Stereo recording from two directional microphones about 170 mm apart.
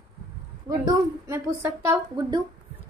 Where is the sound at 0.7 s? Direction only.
20° right (ahead or behind).